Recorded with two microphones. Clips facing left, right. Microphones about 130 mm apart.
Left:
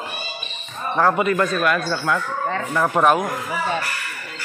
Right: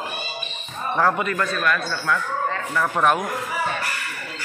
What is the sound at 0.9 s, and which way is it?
A man's voice, 10° left (ahead or behind).